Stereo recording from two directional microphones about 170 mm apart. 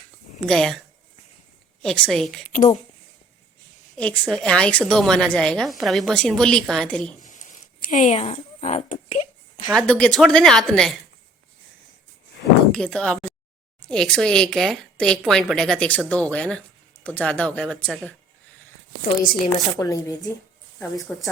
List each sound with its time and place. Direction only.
0.4 s a woman's voice: 5° left (ahead or behind)
1.8 s a woman's voice: 5° left (ahead or behind)
2.5 s speech: 45° left (ahead or behind)
3.9 s a woman's voice: 5° left (ahead or behind)
7.3 s a sound: 50° left (ahead or behind)
9.7 s a woman's voice: 5° left (ahead or behind)
12.7 s a woman's voice: 5° left (ahead or behind)
19.5 s speech: 20° left (ahead or behind)
20.7 s a woman's voice: centre (ahead or behind)